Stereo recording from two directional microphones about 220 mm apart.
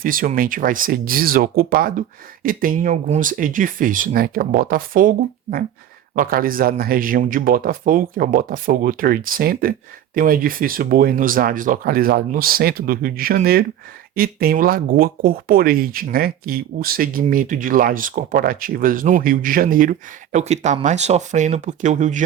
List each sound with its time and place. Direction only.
0.0 s speech: 40° right (ahead or behind)